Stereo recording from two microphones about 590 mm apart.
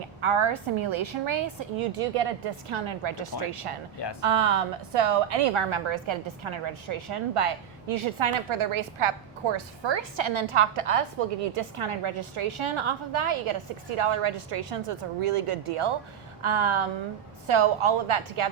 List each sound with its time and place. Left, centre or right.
0.2 s a woman's voice: right